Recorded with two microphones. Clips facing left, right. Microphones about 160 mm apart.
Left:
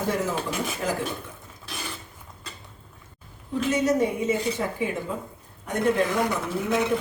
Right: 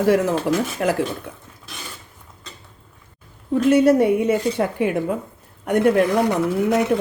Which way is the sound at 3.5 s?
60° right (ahead or behind).